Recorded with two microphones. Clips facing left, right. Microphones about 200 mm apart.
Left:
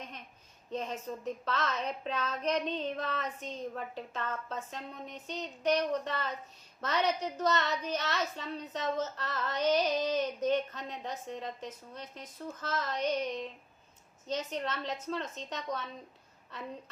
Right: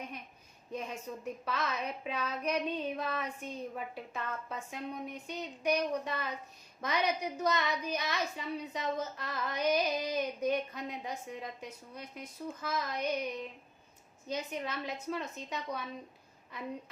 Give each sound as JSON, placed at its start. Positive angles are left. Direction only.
{"t": 0.7, "sound": "a woman's voice", "side_deg": -10}